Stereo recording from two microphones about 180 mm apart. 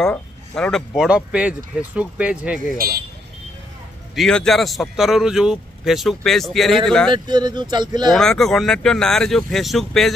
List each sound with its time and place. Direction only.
0.0 s speech: 5° left (ahead or behind)
4.1 s speech: centre (ahead or behind)
7.1 s speech: 25° right (ahead or behind)
8.1 s speech: centre (ahead or behind)